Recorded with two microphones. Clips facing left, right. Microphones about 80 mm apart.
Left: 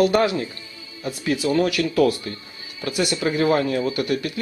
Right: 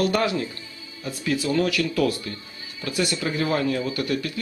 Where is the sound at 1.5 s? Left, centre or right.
Left.